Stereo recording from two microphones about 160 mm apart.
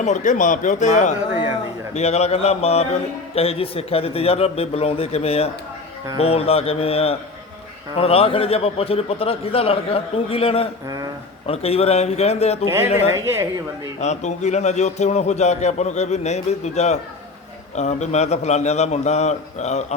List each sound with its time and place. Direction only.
0.0 s a man's voice: 50° left (ahead or behind)
10.8 s speech: 20° right (ahead or behind)
11.4 s a man's voice: 40° left (ahead or behind)
12.6 s a woman's voice: 15° right (ahead or behind)
14.0 s a man's voice: 45° left (ahead or behind)